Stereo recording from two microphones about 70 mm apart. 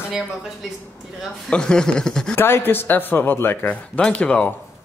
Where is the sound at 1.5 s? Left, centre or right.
Centre.